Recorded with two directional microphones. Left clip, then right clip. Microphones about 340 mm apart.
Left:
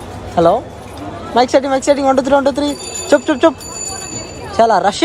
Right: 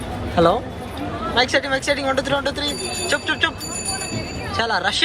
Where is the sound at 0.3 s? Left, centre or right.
Centre.